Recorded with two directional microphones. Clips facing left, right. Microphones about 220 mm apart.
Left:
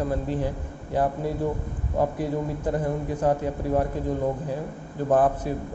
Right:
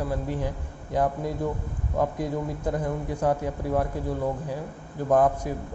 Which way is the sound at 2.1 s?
15° right (ahead or behind).